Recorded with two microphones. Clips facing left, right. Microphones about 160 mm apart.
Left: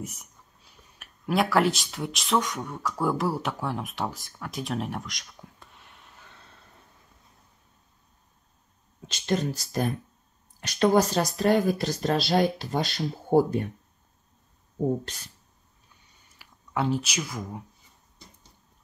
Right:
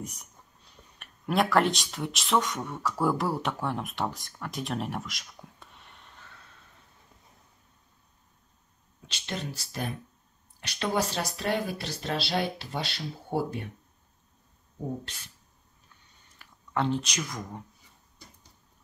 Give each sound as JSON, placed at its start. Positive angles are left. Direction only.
{"t": 0.0, "sound": "speech", "side_deg": 5}
{"t": 9.0, "sound": "speech", "side_deg": 45}
{"t": 15.0, "sound": "speech", "side_deg": 40}
{"t": 16.3, "sound": "speech", "side_deg": 5}